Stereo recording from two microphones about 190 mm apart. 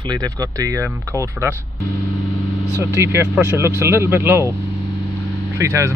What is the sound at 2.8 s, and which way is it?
Speech, 15° right (ahead or behind).